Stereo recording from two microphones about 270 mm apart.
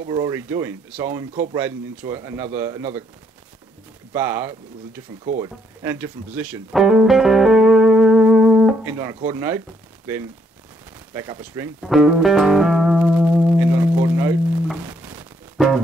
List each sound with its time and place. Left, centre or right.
0.0 s speech: centre
4.1 s speech: centre
11.1 s music: centre